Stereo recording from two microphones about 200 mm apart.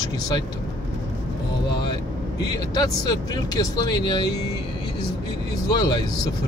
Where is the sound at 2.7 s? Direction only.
20° left (ahead or behind).